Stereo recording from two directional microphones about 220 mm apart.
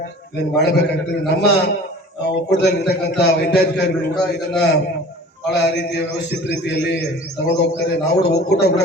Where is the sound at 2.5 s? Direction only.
50° left (ahead or behind).